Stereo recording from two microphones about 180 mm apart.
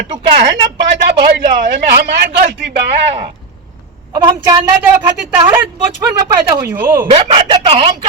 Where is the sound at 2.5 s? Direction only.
75° right (ahead or behind).